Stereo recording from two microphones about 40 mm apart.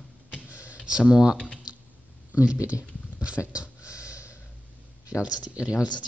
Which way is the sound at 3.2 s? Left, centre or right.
Right.